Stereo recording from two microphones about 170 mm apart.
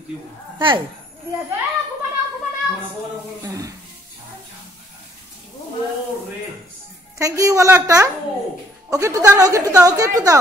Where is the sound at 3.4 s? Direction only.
20° right (ahead or behind).